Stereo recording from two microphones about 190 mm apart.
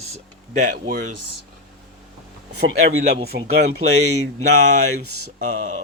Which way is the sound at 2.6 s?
90° right.